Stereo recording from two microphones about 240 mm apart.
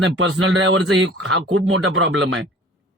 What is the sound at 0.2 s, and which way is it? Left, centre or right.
A man's voice, right.